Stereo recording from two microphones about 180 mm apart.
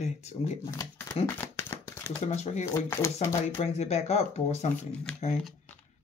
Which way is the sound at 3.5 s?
35° left (ahead or behind).